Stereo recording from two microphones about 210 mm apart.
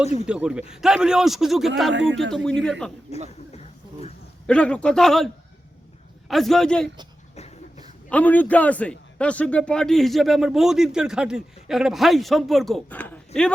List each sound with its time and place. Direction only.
0.3 s a man's voice: 5° right (ahead or behind)
1.9 s speech: 60° right (ahead or behind)
2.6 s a man's voice: 5° left (ahead or behind)
3.5 s a sound: 30° left (ahead or behind)
4.4 s a man's voice: 5° left (ahead or behind)
8.1 s a man's voice: 10° left (ahead or behind)